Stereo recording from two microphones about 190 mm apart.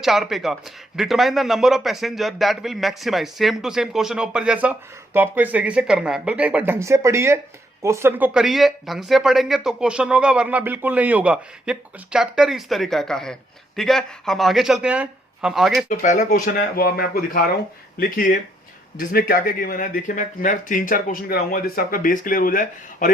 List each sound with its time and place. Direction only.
0.0 s a man's voice: centre (ahead or behind)
15.9 s speech: 40° left (ahead or behind)